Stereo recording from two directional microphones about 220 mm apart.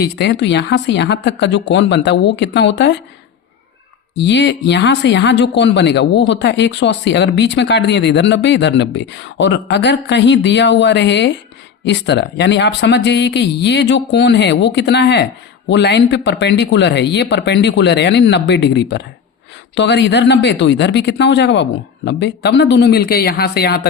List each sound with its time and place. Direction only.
0.0 s speech: 50° left (ahead or behind)
4.2 s speech: 50° left (ahead or behind)